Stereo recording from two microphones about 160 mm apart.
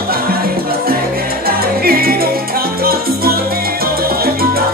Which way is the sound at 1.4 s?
70° right (ahead or behind).